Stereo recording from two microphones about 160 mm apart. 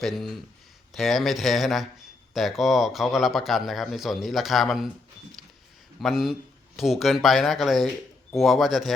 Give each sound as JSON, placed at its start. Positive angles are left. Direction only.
{"t": 0.0, "sound": "a man's voice", "side_deg": 0}
{"t": 6.0, "sound": "a man's voice", "side_deg": 0}